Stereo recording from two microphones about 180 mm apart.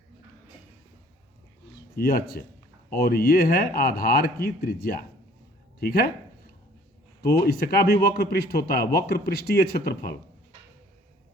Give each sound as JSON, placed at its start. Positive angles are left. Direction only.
{"t": 2.0, "sound": "a man's voice", "side_deg": 55}
{"t": 7.4, "sound": "a man's voice", "side_deg": 60}